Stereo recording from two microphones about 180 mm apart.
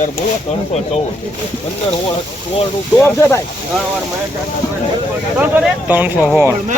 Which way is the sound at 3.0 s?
10° left (ahead or behind).